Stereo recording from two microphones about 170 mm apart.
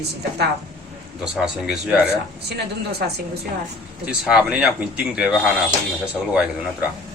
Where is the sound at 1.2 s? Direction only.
Centre (ahead or behind).